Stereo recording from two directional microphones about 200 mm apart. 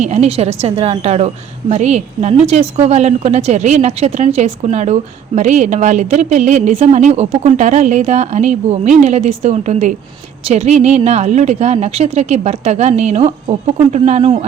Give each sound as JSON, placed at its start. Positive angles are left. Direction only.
{"t": 0.0, "sound": "a woman's voice", "side_deg": -35}